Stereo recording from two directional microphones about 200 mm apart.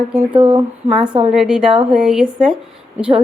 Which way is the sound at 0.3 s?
25° right (ahead or behind).